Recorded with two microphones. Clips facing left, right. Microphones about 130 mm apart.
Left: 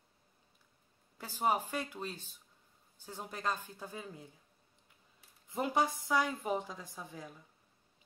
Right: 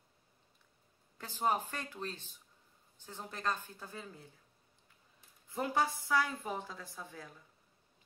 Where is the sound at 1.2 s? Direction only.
10° left (ahead or behind).